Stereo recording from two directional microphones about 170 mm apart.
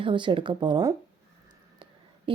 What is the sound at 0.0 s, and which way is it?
Speech, 30° right (ahead or behind).